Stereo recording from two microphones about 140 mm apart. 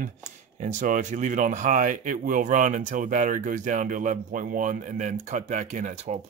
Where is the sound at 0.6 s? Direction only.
60° right (ahead or behind).